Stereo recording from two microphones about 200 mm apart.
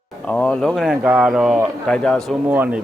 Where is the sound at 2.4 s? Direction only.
10° right (ahead or behind).